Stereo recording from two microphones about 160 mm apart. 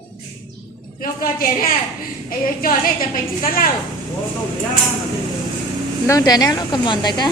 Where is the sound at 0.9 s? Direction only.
60° left (ahead or behind).